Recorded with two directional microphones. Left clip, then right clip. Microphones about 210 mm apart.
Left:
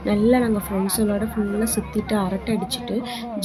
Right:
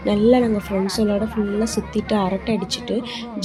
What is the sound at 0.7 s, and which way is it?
Speech, 30° left (ahead or behind).